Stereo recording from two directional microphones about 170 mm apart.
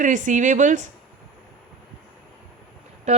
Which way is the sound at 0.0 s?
45° right (ahead or behind).